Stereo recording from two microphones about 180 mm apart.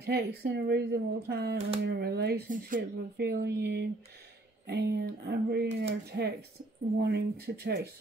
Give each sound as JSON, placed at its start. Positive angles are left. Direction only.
{"t": 0.0, "sound": "a woman's voice", "side_deg": -60}